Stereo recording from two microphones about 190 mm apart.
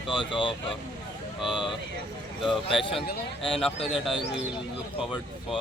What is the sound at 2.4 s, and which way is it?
Speech, 25° left (ahead or behind).